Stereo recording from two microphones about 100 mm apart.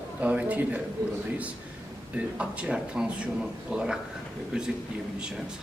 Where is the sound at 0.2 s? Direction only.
15° right (ahead or behind).